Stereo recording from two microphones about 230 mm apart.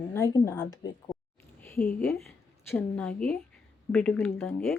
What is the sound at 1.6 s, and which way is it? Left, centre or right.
Speech, centre.